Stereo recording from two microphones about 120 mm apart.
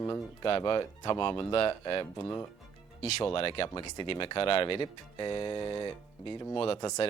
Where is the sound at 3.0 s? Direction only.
65° left (ahead or behind).